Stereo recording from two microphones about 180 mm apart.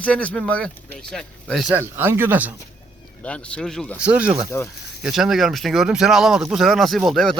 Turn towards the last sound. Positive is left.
turn(degrees=0)  # may be behind; listen again after turning